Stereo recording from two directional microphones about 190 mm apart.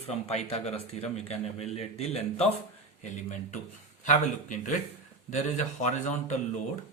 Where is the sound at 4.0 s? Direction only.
40° left (ahead or behind).